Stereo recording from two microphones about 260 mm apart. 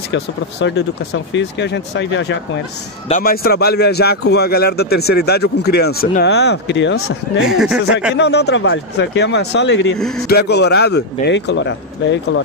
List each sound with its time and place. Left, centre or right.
0.1 s speech: left
3.1 s speech: left
7.4 s speech: centre
8.2 s speech: left
9.9 s speech: centre
10.2 s speech: left